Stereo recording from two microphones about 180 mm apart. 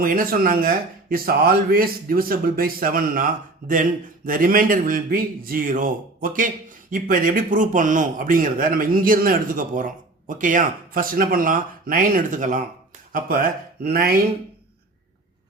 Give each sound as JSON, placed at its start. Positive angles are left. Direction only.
{"t": 0.0, "sound": "speech", "side_deg": -50}